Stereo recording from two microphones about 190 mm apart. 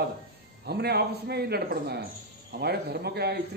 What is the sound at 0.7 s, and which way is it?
A man's voice, 60° right (ahead or behind).